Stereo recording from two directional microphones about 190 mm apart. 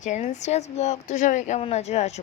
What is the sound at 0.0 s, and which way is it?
Speech, 40° left (ahead or behind).